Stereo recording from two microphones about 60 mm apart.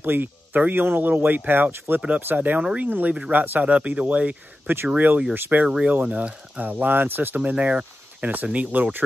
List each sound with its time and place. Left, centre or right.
0.0 s speech: right; by 2.9 s centre
2.9 s speech: right
5.7 s speech: centre